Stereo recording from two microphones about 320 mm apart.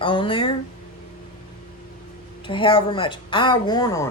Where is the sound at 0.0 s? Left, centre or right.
Centre.